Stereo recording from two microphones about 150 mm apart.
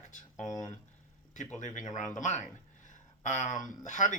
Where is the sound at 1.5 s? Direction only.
55° left (ahead or behind).